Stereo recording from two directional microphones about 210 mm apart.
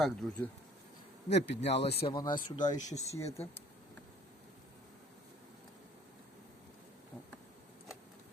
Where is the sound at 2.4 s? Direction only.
40° left (ahead or behind).